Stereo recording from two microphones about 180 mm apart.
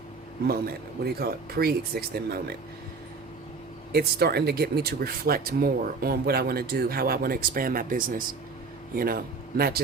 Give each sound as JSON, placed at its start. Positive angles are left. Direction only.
{"t": 1.0, "sound": "speech", "side_deg": -60}
{"t": 3.9, "sound": "speech", "side_deg": -60}